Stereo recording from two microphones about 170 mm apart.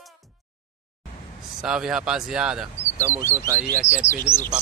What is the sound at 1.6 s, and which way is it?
Speech, 5° right (ahead or behind).